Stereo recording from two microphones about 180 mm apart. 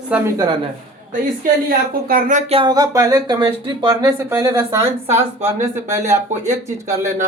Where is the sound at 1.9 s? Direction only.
50° right (ahead or behind).